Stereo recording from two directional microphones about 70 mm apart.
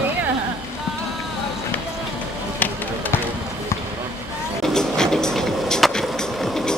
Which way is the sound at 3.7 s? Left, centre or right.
Left.